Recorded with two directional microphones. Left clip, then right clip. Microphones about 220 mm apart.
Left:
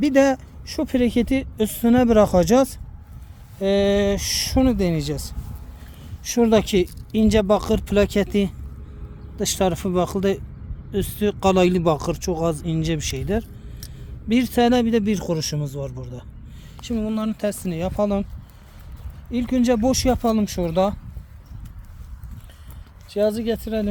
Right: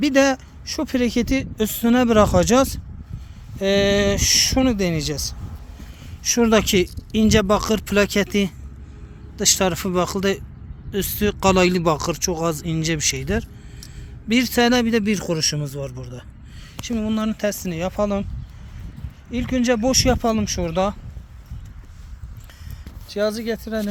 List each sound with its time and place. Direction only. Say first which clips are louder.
0.0 s speech: even; 5° left (ahead or behind)
19.3 s speech: even; centre (ahead or behind)
23.0 s speech: left 1 dB; 20° left (ahead or behind)